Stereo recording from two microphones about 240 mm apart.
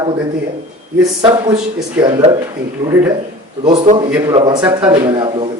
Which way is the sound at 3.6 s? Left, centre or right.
Right.